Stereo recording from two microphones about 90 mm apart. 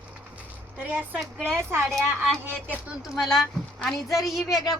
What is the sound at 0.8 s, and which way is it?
A woman's voice, 15° right (ahead or behind).